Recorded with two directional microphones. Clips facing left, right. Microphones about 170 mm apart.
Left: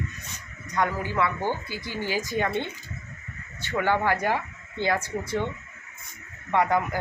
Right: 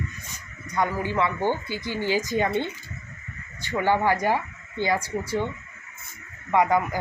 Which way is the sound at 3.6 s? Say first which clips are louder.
Right 2 dB; 15° right (ahead or behind).